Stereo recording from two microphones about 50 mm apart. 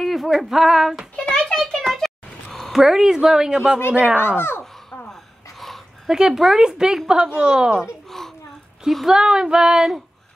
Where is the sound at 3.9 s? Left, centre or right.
Right.